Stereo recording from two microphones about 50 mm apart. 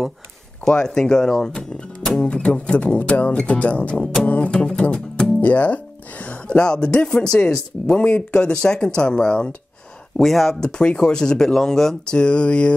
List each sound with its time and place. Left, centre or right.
0.7 s speech: centre
4.9 s music: centre
5.4 s speech: left
10.1 s speech: centre; by 12.7 s left